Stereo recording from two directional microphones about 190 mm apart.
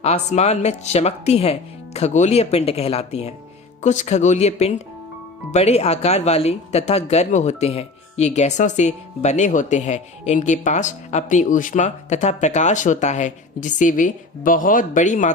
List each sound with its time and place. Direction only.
0.0 s speech: 35° left (ahead or behind)